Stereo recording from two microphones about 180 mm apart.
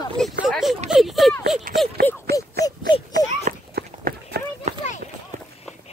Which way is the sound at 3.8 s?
60° right (ahead or behind).